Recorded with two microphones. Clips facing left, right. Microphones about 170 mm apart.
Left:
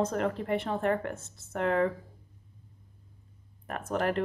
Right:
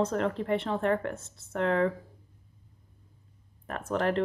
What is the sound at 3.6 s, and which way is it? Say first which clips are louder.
Speech: right 1 dB; 50° left (ahead or behind).